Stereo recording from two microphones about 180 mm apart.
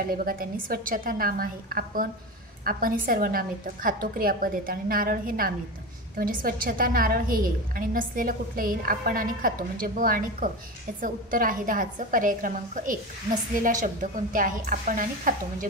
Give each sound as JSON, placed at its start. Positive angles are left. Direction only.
{"t": 0.0, "sound": "a woman's voice", "side_deg": -55}